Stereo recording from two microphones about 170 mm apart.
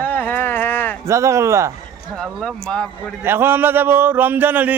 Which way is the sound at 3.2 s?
15° right (ahead or behind).